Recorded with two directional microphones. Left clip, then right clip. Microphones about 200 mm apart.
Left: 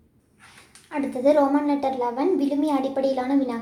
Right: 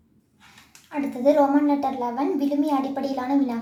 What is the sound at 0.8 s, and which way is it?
A woman's voice, 20° left (ahead or behind).